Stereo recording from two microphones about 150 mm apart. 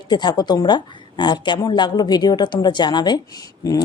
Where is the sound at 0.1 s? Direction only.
30° left (ahead or behind).